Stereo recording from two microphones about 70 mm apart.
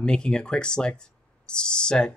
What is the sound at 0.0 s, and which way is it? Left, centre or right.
Speech, centre.